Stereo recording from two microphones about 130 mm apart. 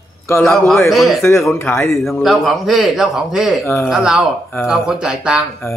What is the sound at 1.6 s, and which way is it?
Speech, 20° left (ahead or behind).